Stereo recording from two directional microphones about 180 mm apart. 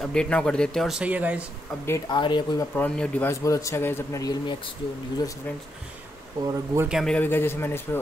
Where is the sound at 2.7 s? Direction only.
5° left (ahead or behind); by 4.7 s 25° left (ahead or behind).